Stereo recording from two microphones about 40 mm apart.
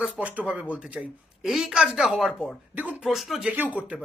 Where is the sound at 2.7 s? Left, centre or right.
Right.